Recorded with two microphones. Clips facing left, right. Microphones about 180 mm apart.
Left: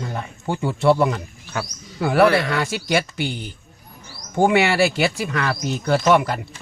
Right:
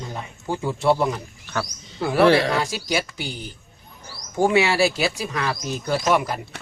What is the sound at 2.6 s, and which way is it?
Speech, 60° left (ahead or behind).